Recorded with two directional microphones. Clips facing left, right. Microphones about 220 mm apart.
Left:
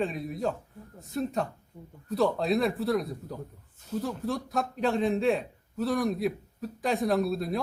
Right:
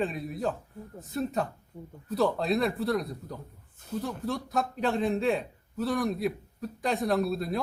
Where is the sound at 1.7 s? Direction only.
30° right (ahead or behind).